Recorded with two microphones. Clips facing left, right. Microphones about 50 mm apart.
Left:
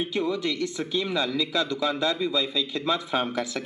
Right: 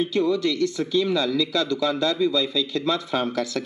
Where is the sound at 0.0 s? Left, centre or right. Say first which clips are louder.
Right 5 dB; centre.